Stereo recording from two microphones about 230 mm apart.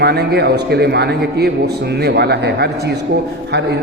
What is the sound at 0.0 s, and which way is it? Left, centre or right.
A man's voice, right.